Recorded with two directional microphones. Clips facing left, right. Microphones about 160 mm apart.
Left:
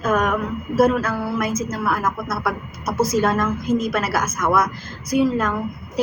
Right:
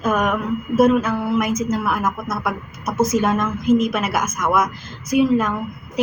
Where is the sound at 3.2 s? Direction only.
10° right (ahead or behind).